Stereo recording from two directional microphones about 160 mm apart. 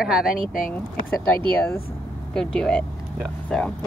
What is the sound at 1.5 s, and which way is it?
Speech, 10° left (ahead or behind).